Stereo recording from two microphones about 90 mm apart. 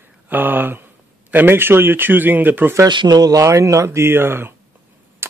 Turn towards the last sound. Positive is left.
turn(degrees=-25)  # may be behind; listen again after turning